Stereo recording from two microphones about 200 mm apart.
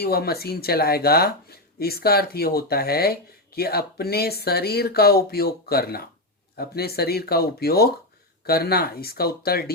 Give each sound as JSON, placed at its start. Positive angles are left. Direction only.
{"t": 0.0, "sound": "speech", "side_deg": 50}